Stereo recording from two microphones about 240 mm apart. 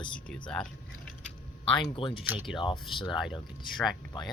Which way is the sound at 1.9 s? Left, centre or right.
Left.